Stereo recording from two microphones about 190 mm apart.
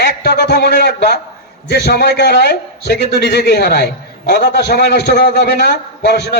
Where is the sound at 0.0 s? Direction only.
65° left (ahead or behind).